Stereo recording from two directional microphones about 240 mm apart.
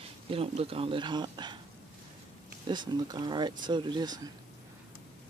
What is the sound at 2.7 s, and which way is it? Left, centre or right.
Speech, centre.